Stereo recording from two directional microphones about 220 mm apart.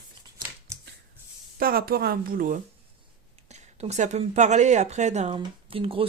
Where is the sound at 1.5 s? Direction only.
40° right (ahead or behind).